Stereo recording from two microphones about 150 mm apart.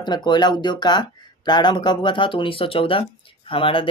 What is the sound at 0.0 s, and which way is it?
Speech, 30° left (ahead or behind).